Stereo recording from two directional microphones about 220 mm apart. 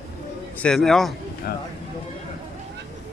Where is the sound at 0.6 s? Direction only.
Centre (ahead or behind).